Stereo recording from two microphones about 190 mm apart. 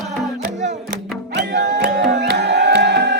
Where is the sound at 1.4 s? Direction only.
65° right (ahead or behind).